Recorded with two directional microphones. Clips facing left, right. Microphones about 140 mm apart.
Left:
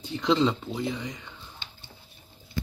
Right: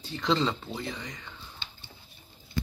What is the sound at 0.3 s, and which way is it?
Speech, 5° left (ahead or behind).